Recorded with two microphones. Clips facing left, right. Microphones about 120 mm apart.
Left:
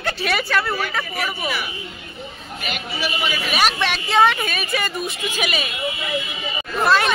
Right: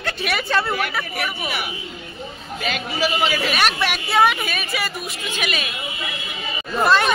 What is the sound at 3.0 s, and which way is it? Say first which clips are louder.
Speech: right 5 dB; 90° right.